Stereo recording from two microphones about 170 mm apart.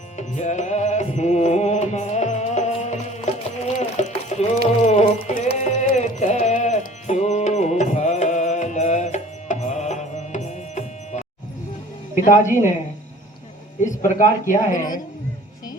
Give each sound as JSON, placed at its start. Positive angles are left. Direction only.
{"t": 0.2, "sound": "music", "side_deg": 45}
{"t": 4.8, "sound": "sheep", "side_deg": 45}
{"t": 12.2, "sound": "a woman's voice", "side_deg": 50}
{"t": 14.2, "sound": "speech", "side_deg": 50}